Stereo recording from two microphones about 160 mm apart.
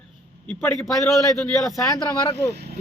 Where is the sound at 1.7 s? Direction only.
20° left (ahead or behind).